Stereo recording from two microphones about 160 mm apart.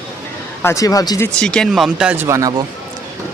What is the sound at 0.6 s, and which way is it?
Speech, 20° left (ahead or behind).